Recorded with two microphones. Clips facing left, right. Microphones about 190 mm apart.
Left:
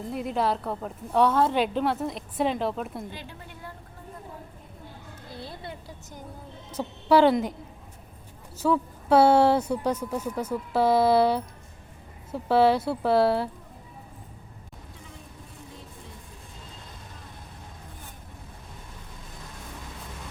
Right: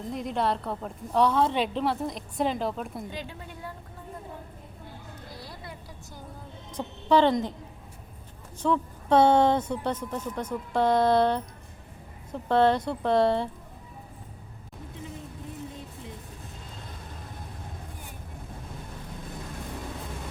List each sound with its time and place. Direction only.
0.1 s a woman's voice: 5° left (ahead or behind)
5.3 s a sound: 25° left (ahead or behind)
6.7 s a woman's voice: 10° left (ahead or behind)
8.5 s a woman's voice: 5° left (ahead or behind)